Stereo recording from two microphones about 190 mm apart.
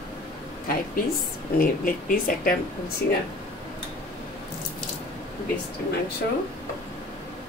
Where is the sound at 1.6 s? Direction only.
45° left (ahead or behind).